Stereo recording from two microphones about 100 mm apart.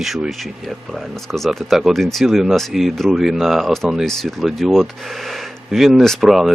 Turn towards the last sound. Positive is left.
turn(degrees=0)  # may be behind; listen again after turning